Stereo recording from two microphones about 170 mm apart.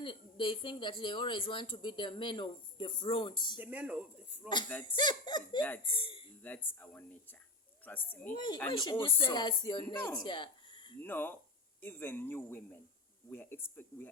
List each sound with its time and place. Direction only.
0.0 s speech: 30° left (ahead or behind)
3.6 s speech: 10° right (ahead or behind)
4.9 s speech: 25° left (ahead or behind)
6.4 s speech: 10° left (ahead or behind)
8.4 s speech: 25° left (ahead or behind)
10.0 s speech: 10° left (ahead or behind)
10.2 s a sound: 25° left (ahead or behind)
11.0 s speech: 10° left (ahead or behind)